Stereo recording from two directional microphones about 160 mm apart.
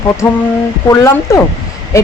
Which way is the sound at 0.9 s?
15° left (ahead or behind).